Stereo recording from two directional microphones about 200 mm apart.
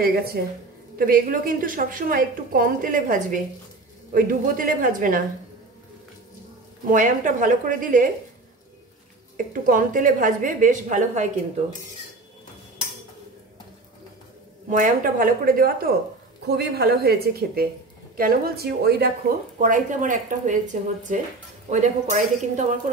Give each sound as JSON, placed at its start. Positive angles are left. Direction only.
{"t": 0.0, "sound": "a woman's voice", "side_deg": -50}
{"t": 6.9, "sound": "a woman's voice", "side_deg": -40}
{"t": 9.5, "sound": "a woman's voice", "side_deg": -40}
{"t": 14.7, "sound": "a woman's voice", "side_deg": -40}